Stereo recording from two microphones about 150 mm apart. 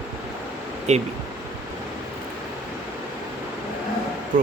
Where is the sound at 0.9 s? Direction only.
50° right (ahead or behind).